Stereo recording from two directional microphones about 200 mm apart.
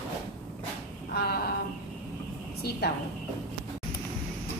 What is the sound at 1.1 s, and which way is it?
Speech, 50° left (ahead or behind).